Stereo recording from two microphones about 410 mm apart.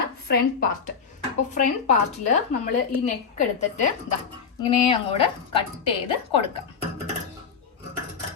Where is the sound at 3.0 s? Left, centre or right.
Centre.